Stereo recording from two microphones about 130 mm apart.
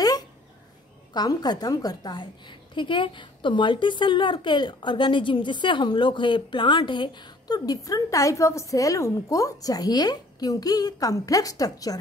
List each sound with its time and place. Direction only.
1.1 s a woman's voice: 30° left (ahead or behind)